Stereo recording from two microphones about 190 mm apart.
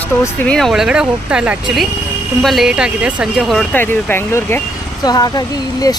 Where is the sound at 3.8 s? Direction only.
10° left (ahead or behind).